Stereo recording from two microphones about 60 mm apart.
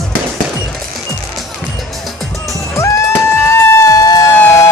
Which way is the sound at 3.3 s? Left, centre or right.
Left.